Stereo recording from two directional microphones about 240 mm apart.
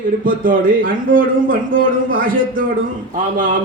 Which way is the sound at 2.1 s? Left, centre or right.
Right.